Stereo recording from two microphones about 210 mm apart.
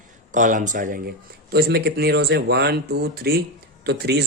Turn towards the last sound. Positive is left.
turn(degrees=-50)  # may be behind; listen again after turning